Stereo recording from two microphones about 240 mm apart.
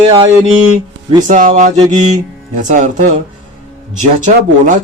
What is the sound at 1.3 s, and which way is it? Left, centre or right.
Speech, right.